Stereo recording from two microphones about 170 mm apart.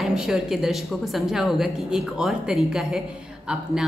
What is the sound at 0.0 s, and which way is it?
A woman's voice, centre (ahead or behind).